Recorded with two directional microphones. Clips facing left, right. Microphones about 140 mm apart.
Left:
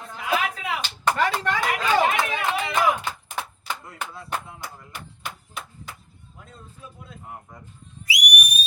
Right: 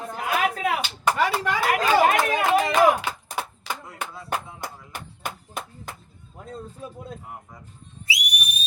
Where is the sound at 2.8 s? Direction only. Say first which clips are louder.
Right 4 dB; 35° right (ahead or behind).